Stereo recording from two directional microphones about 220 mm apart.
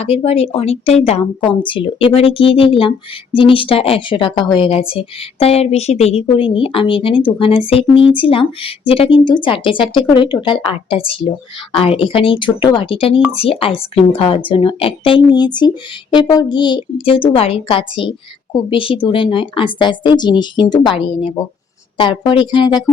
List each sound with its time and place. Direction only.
0.0 s a woman's voice: 25° left (ahead or behind)